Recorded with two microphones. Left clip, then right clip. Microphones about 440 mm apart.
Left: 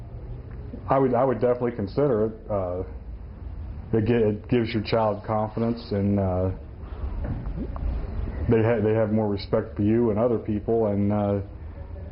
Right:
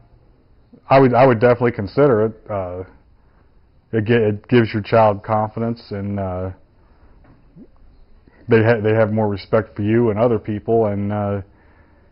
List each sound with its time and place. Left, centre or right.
0.9 s speech: right
3.9 s speech: right
8.4 s speech: right